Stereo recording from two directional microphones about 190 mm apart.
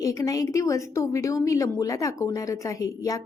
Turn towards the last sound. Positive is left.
turn(degrees=20)  # may be behind; listen again after turning